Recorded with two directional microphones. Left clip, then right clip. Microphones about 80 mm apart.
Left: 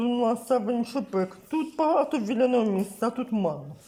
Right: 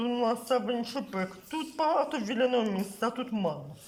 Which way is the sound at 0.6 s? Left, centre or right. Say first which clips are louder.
Left 3 dB; left.